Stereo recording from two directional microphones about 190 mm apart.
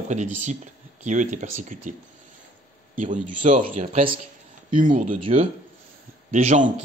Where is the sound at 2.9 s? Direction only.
40° right (ahead or behind).